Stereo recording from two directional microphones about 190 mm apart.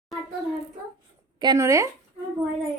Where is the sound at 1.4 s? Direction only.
20° right (ahead or behind).